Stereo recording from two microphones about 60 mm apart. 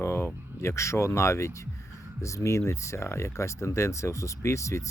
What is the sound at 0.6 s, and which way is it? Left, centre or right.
Speech, left.